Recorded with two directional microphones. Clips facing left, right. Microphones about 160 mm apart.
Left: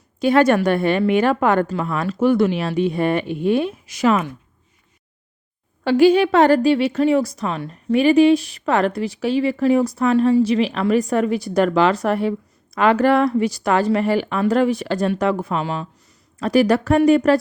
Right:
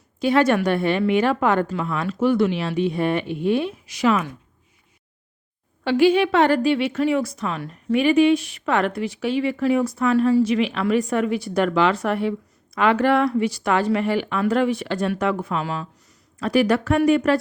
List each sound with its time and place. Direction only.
0.2 s a woman's voice: 50° left (ahead or behind)
5.8 s a woman's voice: 40° left (ahead or behind)